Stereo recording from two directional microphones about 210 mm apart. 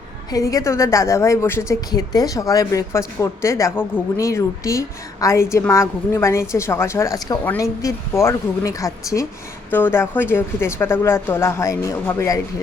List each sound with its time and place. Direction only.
0.3 s a woman's voice: 15° left (ahead or behind)